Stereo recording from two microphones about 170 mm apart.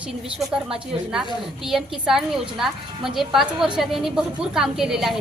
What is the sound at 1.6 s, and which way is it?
A woman's voice, centre (ahead or behind).